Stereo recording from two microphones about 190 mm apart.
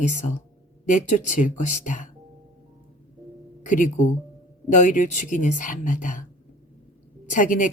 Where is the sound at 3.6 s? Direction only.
40° left (ahead or behind).